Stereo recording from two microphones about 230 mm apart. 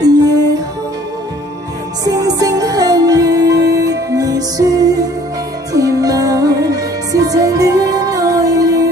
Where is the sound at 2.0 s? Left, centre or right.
Centre.